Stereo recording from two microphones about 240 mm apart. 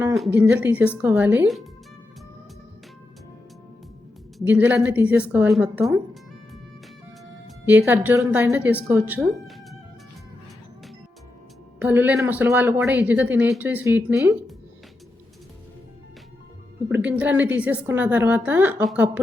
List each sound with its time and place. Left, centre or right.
0.0 s speech: centre
4.4 s speech: centre
7.4 s speech: centre
11.8 s speech: centre
16.9 s speech: centre